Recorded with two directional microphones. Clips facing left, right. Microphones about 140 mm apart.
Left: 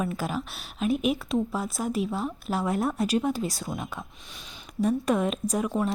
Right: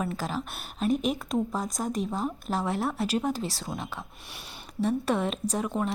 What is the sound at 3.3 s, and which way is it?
Speech, 35° right (ahead or behind).